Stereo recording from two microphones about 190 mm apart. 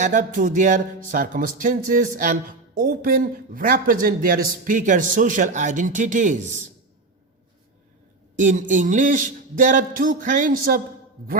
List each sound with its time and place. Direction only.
0.0 s speech: 40° right (ahead or behind)
8.4 s speech: 40° right (ahead or behind)